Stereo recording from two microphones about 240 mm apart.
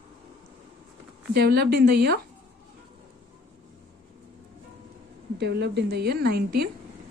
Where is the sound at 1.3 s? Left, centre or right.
Right.